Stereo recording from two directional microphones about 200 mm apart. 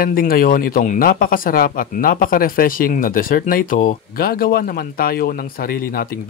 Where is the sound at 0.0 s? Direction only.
45° left (ahead or behind).